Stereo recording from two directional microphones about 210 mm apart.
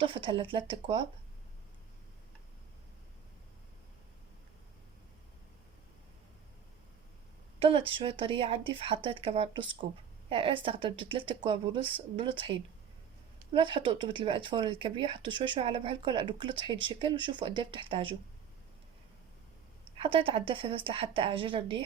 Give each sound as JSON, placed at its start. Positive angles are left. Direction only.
{"t": 0.0, "sound": "speech", "side_deg": -25}
{"t": 7.6, "sound": "speech", "side_deg": -25}
{"t": 20.0, "sound": "speech", "side_deg": -25}